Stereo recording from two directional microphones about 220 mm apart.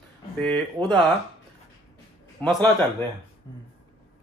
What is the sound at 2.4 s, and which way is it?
Speech, 5° left (ahead or behind).